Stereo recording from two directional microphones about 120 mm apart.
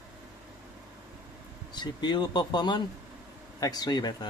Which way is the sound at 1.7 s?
40° left (ahead or behind).